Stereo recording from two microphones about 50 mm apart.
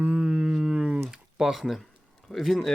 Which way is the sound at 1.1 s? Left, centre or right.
Centre.